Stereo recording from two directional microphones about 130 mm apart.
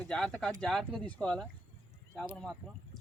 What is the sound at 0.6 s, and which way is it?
Speech, 5° left (ahead or behind).